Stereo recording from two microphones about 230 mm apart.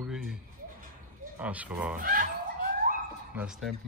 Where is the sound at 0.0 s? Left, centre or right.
Centre.